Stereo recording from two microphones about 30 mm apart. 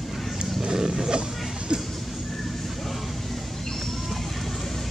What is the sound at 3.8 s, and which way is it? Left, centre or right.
Vehicle, centre.